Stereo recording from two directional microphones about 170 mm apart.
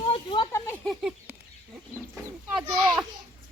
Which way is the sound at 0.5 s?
10° left (ahead or behind).